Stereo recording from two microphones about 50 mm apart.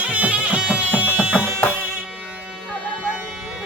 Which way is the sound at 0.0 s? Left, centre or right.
Right.